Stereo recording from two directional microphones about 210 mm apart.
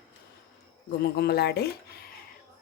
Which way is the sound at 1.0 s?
50° left (ahead or behind).